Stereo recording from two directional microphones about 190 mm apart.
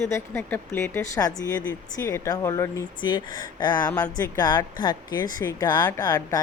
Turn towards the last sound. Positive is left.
turn(degrees=20)  # may be behind; listen again after turning